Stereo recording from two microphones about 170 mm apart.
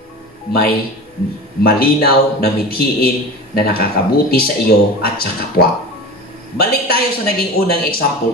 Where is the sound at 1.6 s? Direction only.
65° left (ahead or behind).